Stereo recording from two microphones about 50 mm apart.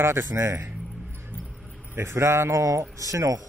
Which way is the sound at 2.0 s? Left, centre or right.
Right.